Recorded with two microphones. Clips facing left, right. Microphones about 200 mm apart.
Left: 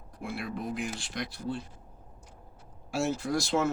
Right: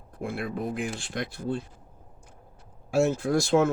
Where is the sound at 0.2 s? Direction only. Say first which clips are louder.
Right 4 dB; 50° right (ahead or behind).